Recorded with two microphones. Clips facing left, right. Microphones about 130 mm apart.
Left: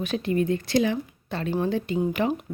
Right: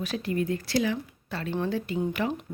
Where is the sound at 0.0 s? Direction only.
20° left (ahead or behind).